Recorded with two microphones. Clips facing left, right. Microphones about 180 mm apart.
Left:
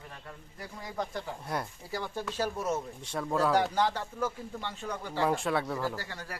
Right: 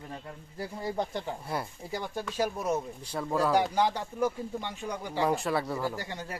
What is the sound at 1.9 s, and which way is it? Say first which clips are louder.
Speech: right 1 dB; 15° right (ahead or behind).